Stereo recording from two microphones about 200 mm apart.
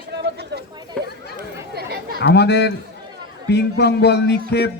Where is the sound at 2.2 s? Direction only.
55° left (ahead or behind).